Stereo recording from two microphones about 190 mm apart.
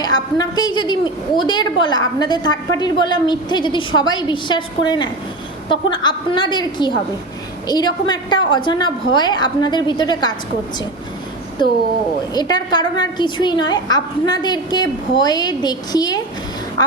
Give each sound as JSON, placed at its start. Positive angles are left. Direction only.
{"t": 0.0, "sound": "a woman's voice", "side_deg": 20}
{"t": 11.6, "sound": "a woman's voice", "side_deg": 25}